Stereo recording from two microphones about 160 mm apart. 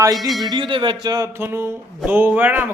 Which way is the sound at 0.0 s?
25° right (ahead or behind).